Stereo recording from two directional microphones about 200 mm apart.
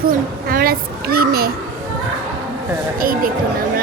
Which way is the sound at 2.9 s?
45° right (ahead or behind).